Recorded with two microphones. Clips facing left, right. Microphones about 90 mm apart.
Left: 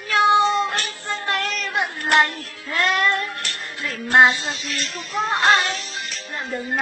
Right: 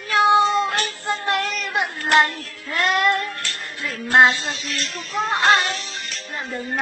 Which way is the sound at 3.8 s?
Centre (ahead or behind).